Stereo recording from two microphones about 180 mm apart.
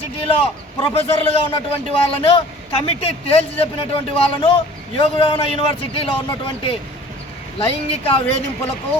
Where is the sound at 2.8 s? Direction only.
35° left (ahead or behind).